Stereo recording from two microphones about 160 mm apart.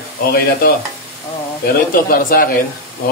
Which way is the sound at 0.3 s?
70° left (ahead or behind).